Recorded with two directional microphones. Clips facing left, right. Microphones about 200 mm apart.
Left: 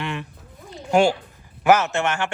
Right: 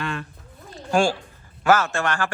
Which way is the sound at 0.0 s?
20° left (ahead or behind).